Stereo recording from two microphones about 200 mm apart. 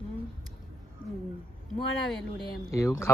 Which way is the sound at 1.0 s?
45° left (ahead or behind).